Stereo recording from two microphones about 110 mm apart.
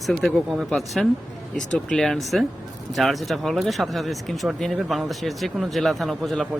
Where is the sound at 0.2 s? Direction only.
Centre (ahead or behind).